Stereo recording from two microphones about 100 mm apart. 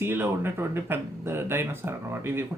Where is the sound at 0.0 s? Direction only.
20° right (ahead or behind).